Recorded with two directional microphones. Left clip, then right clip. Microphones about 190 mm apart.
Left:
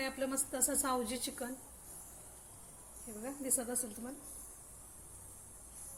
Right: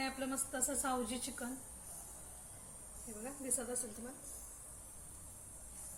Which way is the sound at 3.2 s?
35° left (ahead or behind).